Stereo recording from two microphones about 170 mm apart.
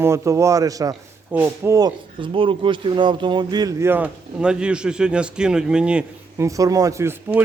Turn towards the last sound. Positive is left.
turn(degrees=-15)  # may be behind; listen again after turning